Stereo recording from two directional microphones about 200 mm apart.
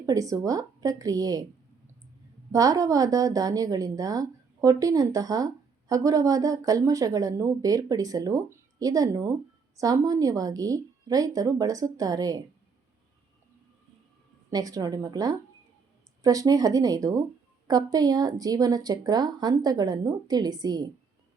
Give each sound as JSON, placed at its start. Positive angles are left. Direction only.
{"t": 0.0, "sound": "speech", "side_deg": -15}
{"t": 2.5, "sound": "speech", "side_deg": -15}
{"t": 14.5, "sound": "speech", "side_deg": -20}